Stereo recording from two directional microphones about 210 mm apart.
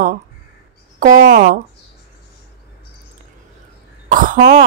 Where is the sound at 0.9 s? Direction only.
40° right (ahead or behind).